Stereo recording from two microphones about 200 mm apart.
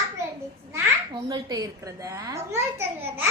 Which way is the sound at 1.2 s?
20° right (ahead or behind).